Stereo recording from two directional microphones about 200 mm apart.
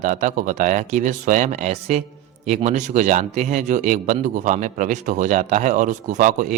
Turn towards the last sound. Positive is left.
turn(degrees=-40)  # may be behind; listen again after turning